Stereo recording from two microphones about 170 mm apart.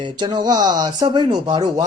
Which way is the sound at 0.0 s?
25° right (ahead or behind).